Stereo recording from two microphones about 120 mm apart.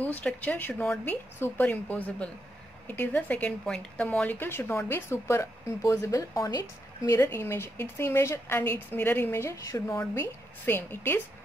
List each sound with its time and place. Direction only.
0.0 s a woman's voice: 15° left (ahead or behind)